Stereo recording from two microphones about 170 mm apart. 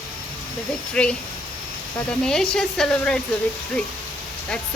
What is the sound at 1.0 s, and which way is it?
Speech, 5° left (ahead or behind).